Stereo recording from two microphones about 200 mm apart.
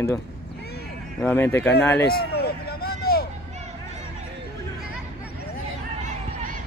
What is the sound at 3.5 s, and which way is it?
Music, 35° right (ahead or behind).